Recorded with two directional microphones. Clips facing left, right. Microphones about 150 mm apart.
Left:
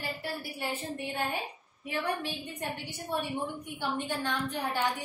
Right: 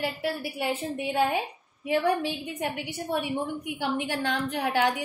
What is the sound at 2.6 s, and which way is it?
A woman's voice, 85° right.